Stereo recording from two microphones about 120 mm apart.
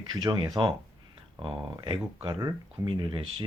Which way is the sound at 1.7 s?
45° right (ahead or behind).